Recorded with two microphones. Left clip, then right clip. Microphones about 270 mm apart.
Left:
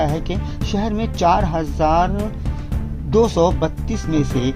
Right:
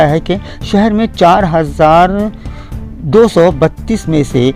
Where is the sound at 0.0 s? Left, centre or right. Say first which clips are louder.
Right 11 dB; right.